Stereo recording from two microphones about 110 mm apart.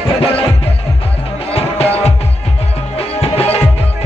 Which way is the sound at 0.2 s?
60° left (ahead or behind).